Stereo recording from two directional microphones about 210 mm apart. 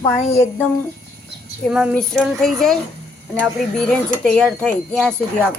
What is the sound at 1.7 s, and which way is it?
A woman's voice, centre (ahead or behind).